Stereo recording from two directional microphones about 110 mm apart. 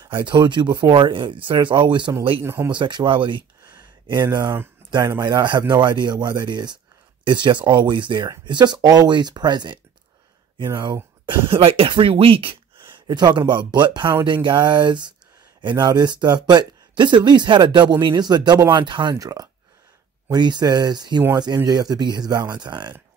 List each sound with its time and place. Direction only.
0.0 s speech: 45° right (ahead or behind)
2.4 s speech: 25° right (ahead or behind)
2.7 s speech: 45° right (ahead or behind)